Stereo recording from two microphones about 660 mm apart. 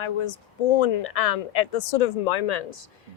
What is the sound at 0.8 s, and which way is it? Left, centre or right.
A woman's voice, left.